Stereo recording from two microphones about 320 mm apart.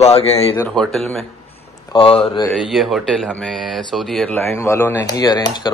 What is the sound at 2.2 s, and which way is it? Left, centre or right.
Speech, centre.